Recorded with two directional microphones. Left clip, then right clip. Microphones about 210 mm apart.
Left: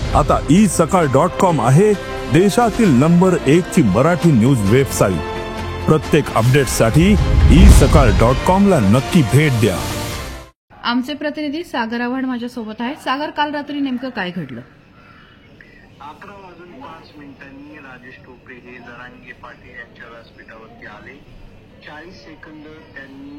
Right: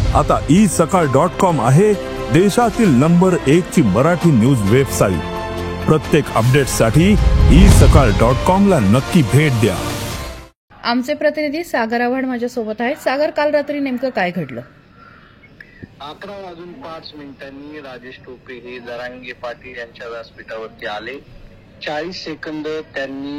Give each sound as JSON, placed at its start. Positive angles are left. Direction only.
{"t": 0.1, "sound": "speech", "side_deg": 0}
{"t": 10.8, "sound": "speech", "side_deg": -10}
{"t": 18.5, "sound": "speech", "side_deg": -50}